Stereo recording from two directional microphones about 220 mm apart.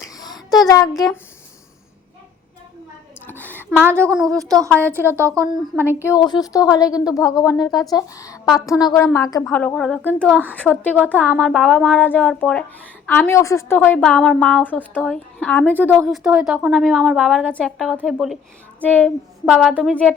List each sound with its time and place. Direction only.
0.1 s child singing: 15° left (ahead or behind)
3.2 s a sound: 10° left (ahead or behind)
3.8 s a woman's voice: 5° left (ahead or behind)
4.4 s speech: 15° right (ahead or behind)
6.0 s a woman's voice: 15° left (ahead or behind)
15.9 s a woman's voice: 5° right (ahead or behind)